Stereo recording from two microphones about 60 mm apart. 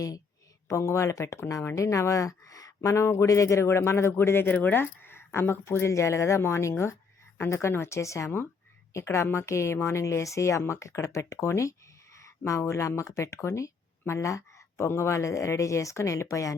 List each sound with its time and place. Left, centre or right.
0.7 s speech: left
2.9 s speech: left